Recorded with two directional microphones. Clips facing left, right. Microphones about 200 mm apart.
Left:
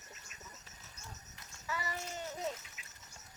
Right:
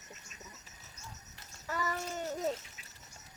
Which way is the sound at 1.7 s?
45° right (ahead or behind).